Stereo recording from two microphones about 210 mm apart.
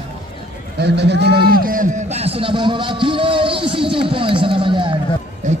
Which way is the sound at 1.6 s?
40° right (ahead or behind).